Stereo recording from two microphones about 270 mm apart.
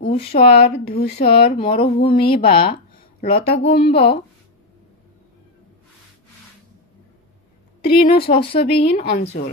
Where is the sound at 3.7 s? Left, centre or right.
Left.